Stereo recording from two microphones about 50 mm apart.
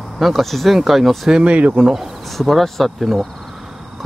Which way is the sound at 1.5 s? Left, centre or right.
Right.